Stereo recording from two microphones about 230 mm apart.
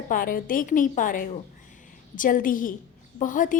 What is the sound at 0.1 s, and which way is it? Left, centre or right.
A woman's voice, left.